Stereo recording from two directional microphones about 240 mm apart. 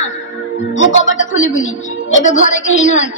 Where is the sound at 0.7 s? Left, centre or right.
Left.